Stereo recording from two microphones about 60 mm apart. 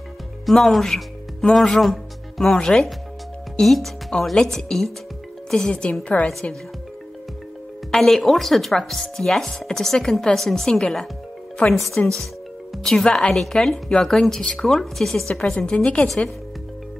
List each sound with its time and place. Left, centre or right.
0.5 s chopping: centre
1.5 s speech: centre
3.6 s chopping: centre
5.5 s speech: centre
7.9 s chopping: centre
15.5 s a woman's voice: centre